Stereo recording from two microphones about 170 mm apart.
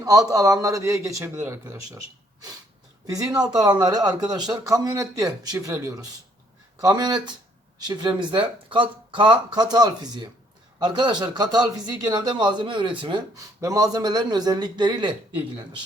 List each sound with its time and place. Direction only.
0.0 s speech: 20° right (ahead or behind)
3.1 s speech: 20° right (ahead or behind)